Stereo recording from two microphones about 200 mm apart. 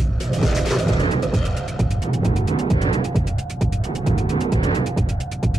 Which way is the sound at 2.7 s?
25° left (ahead or behind).